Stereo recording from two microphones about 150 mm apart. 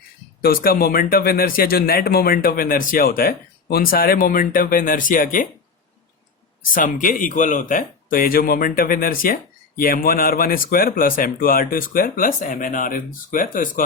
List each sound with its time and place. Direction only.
0.4 s speech: 75° left (ahead or behind)
6.7 s speech: 65° left (ahead or behind)